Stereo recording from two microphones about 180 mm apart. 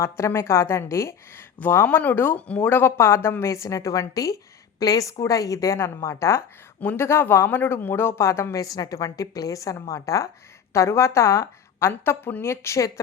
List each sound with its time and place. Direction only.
0.0 s speech: 15° left (ahead or behind)